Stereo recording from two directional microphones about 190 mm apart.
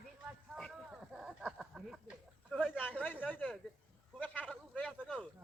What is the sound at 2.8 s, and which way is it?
Speech, 10° left (ahead or behind).